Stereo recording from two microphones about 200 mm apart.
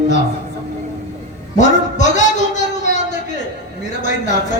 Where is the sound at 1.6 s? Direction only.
35° left (ahead or behind).